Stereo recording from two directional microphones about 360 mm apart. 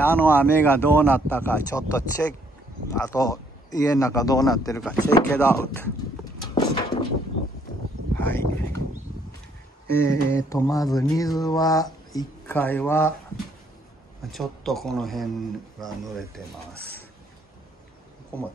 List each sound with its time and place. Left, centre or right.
0.0 s speech: centre
2.9 s mantra: centre
6.5 s a sound: centre
8.2 s speech: centre
10.0 s mantra: centre
14.3 s speech: centre